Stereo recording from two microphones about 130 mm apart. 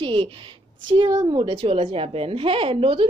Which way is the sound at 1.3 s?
45° right (ahead or behind).